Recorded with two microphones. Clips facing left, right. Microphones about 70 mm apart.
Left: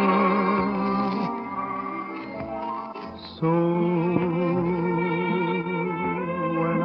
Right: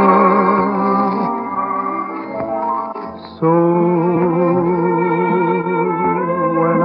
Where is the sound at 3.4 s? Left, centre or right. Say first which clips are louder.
Right 9 dB; right.